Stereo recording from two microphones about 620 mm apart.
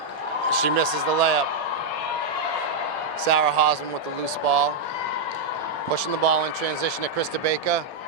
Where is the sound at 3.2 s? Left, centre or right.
Right.